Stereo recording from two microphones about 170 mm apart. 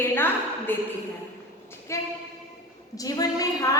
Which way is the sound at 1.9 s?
15° left (ahead or behind).